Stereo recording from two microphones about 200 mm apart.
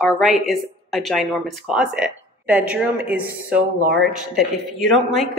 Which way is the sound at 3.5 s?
45° right (ahead or behind).